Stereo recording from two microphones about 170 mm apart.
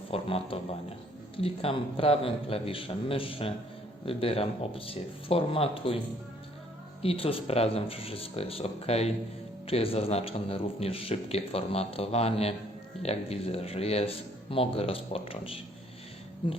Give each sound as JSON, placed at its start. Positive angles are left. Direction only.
{"t": 0.1, "sound": "a man's voice", "side_deg": 35}
{"t": 7.0, "sound": "a man's voice", "side_deg": 35}